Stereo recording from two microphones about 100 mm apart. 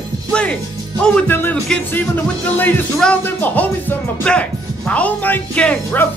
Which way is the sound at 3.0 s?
5° left (ahead or behind).